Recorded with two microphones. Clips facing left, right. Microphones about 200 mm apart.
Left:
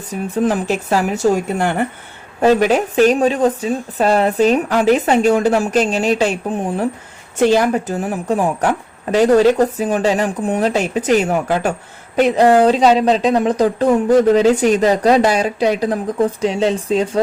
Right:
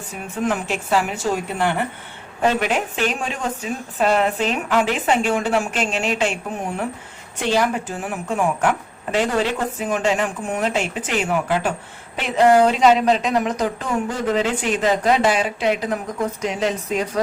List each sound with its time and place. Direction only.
0.1 s a woman's voice: 35° left (ahead or behind)